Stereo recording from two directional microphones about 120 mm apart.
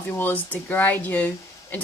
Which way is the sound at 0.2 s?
15° left (ahead or behind).